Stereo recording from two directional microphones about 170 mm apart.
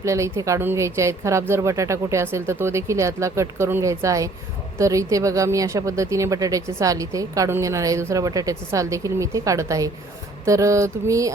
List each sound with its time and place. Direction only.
0.0 s speech: 15° right (ahead or behind)